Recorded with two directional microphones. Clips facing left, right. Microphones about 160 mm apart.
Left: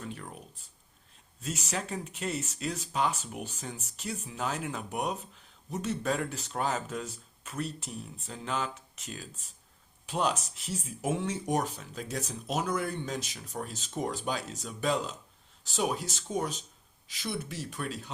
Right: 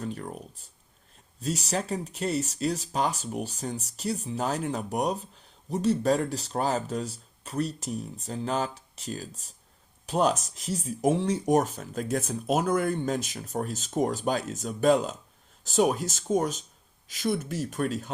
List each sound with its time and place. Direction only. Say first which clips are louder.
0.0 s speech: right 7 dB; 40° right (ahead or behind)
11.4 s speech: right 7 dB; 45° right (ahead or behind)